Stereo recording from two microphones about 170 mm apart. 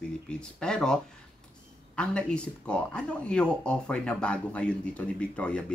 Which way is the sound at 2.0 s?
5° left (ahead or behind).